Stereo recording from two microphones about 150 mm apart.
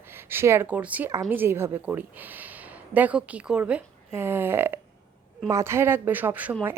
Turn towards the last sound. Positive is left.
turn(degrees=-10)  # may be behind; listen again after turning